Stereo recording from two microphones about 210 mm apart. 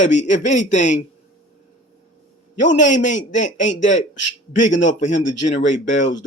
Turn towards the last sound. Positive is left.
turn(degrees=35)  # may be behind; listen again after turning